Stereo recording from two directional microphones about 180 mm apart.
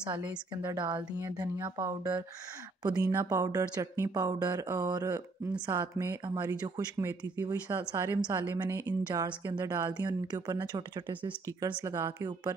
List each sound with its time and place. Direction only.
0.2 s a woman's voice: 10° right (ahead or behind)
0.7 s a woman's voice: 25° right (ahead or behind)